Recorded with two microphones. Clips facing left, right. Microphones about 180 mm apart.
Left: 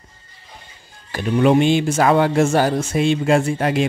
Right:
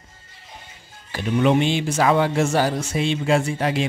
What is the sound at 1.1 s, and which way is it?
Speech, 45° left (ahead or behind).